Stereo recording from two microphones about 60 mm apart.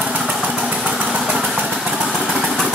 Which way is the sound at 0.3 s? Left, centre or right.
Centre.